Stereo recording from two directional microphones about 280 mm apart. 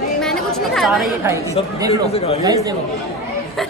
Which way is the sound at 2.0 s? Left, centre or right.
Left.